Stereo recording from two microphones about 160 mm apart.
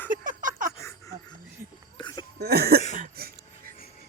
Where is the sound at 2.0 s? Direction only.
30° left (ahead or behind).